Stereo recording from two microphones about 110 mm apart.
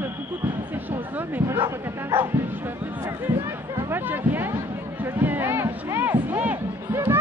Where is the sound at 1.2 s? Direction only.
15° right (ahead or behind).